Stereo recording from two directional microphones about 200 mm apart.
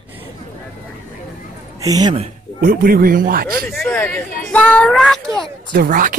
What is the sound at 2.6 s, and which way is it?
Speech, 50° right (ahead or behind).